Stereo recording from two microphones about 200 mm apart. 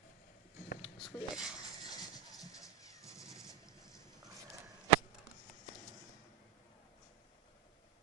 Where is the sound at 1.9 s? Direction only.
20° left (ahead or behind).